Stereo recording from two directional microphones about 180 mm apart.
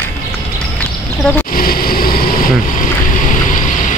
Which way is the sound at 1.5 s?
55° left (ahead or behind).